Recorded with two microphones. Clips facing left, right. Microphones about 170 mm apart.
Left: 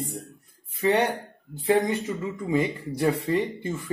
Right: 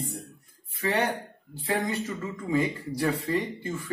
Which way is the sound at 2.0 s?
20° left (ahead or behind).